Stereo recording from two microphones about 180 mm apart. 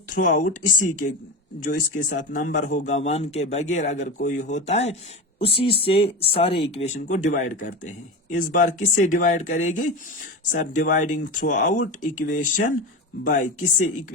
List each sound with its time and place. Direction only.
0.1 s speech: 45° left (ahead or behind)